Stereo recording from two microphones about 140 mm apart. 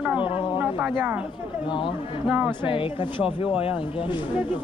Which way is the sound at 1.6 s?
35° left (ahead or behind).